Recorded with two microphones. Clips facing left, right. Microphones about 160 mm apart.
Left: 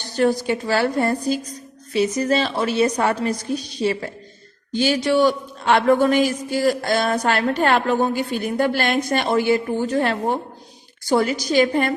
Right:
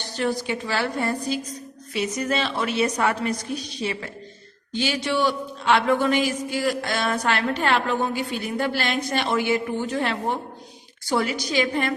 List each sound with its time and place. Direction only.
0.2 s a woman's voice: 40° left (ahead or behind)